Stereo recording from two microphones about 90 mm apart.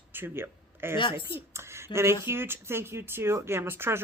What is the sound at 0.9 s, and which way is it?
Speech, 70° left (ahead or behind).